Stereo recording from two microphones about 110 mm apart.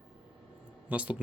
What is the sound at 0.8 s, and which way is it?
Speech, 10° right (ahead or behind).